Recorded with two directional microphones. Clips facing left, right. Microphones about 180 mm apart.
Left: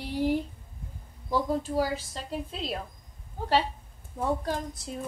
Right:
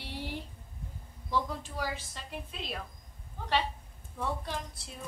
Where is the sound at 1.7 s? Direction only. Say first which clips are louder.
Left 9 dB; 35° left (ahead or behind).